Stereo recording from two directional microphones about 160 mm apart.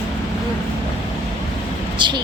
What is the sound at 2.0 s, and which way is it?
Speech, 30° right (ahead or behind).